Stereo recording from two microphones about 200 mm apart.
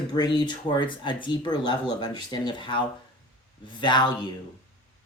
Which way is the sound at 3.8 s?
20° left (ahead or behind).